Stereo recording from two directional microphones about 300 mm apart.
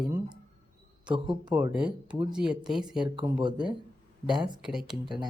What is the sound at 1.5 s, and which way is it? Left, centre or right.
Speech, centre.